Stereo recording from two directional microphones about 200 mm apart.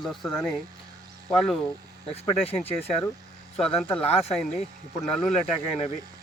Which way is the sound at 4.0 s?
30° left (ahead or behind).